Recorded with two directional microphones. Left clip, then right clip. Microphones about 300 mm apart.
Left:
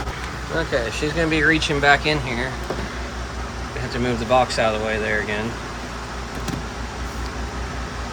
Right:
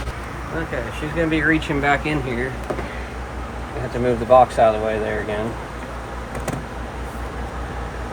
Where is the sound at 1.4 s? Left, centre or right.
Centre.